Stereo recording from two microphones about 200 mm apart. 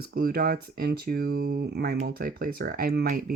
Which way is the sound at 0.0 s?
50° right (ahead or behind).